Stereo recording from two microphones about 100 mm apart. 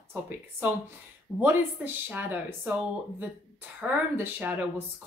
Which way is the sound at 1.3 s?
10° right (ahead or behind).